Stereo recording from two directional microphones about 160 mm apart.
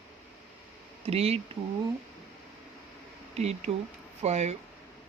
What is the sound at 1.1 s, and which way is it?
Speech, 40° right (ahead or behind).